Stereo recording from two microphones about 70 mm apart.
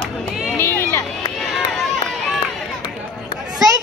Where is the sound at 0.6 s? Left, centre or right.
Left.